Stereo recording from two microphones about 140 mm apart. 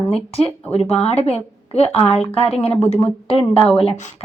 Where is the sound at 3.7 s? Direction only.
45° left (ahead or behind).